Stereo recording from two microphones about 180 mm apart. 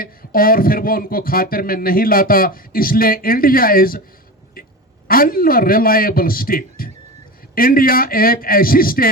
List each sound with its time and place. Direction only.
0.0 s speech: 55° left (ahead or behind)
5.0 s speech: 55° left (ahead or behind)